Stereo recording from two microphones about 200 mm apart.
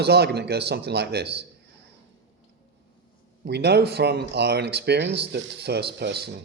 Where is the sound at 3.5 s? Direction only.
55° right (ahead or behind).